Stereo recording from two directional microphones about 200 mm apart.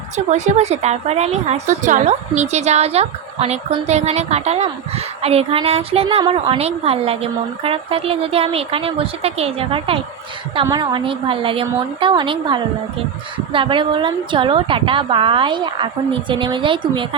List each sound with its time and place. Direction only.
0.3 s a woman's voice: 35° right (ahead or behind)